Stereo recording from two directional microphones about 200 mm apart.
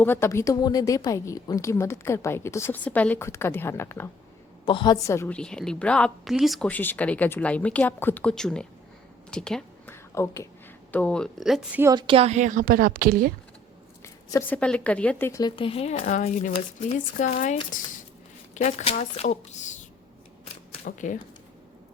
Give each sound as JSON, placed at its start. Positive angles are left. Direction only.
{"t": 0.0, "sound": "a woman's voice", "side_deg": 10}
{"t": 4.6, "sound": "a woman's voice", "side_deg": 25}
{"t": 11.9, "sound": "a woman's voice", "side_deg": -25}
{"t": 14.0, "sound": "speech", "side_deg": 15}
{"t": 20.8, "sound": "speech", "side_deg": 40}